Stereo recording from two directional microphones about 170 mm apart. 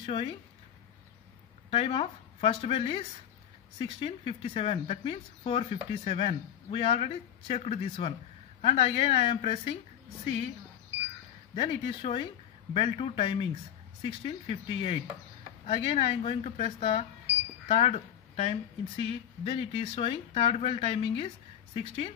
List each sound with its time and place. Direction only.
0.0 s speech: 30° left (ahead or behind)
1.7 s speech: 30° left (ahead or behind)
11.5 s speech: 35° left (ahead or behind)